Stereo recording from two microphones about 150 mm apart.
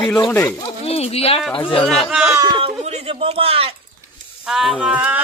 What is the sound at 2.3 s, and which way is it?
Speech, 25° right (ahead or behind).